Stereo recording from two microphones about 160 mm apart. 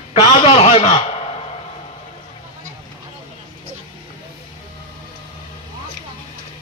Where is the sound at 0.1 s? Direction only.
35° left (ahead or behind).